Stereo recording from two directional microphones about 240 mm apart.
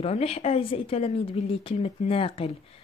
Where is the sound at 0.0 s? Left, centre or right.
Left.